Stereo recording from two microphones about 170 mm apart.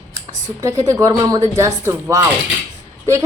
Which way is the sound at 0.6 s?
20° right (ahead or behind).